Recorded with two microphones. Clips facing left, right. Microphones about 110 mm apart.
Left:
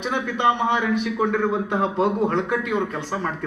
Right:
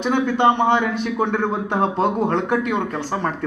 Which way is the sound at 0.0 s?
30° right (ahead or behind).